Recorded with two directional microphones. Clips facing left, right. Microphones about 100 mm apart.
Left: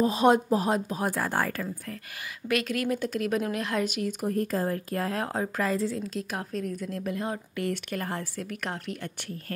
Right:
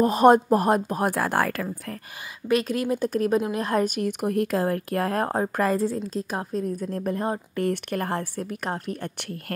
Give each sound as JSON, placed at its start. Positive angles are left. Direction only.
{"t": 0.0, "sound": "a woman's voice", "side_deg": -50}
{"t": 2.4, "sound": "a woman's voice", "side_deg": -30}
{"t": 4.2, "sound": "a woman's voice", "side_deg": -70}
{"t": 7.7, "sound": "a woman's voice", "side_deg": -55}
{"t": 8.4, "sound": "a woman's voice", "side_deg": -35}